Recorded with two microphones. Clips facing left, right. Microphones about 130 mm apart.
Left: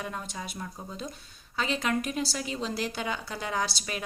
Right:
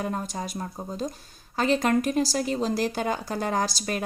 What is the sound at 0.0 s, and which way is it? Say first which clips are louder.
A woman's voice: right 6 dB; 40° right (ahead or behind).